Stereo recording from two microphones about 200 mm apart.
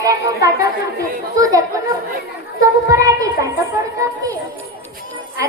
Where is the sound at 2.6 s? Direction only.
15° right (ahead or behind).